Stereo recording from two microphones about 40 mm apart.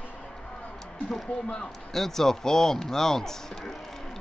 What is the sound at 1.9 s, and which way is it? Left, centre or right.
Speech, centre.